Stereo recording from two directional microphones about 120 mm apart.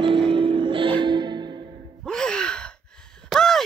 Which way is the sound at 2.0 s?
5° left (ahead or behind).